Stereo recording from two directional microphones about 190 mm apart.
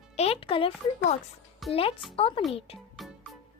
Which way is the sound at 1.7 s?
30° left (ahead or behind).